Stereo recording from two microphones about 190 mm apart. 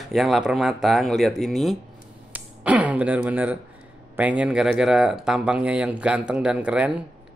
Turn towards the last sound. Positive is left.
turn(degrees=-5)  # may be behind; listen again after turning